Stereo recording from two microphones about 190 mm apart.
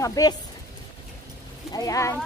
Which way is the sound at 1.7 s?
15° left (ahead or behind).